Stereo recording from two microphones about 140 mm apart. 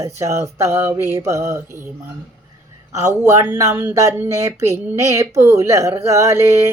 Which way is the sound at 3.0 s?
20° right (ahead or behind).